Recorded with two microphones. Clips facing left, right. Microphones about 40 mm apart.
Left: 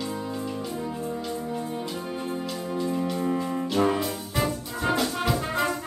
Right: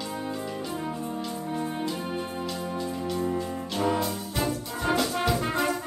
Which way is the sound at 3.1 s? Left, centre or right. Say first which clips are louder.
Left 2 dB; left.